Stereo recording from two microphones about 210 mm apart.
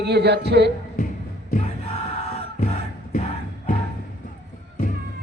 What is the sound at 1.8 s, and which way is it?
Music, 25° left (ahead or behind).